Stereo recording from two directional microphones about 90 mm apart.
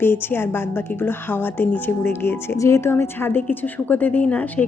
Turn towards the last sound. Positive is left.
turn(degrees=15)  # may be behind; listen again after turning